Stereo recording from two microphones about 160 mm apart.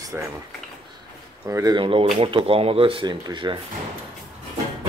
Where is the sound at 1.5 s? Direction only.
20° right (ahead or behind).